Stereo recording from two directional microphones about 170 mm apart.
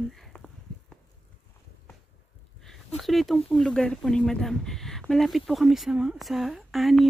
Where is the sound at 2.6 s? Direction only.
Centre (ahead or behind).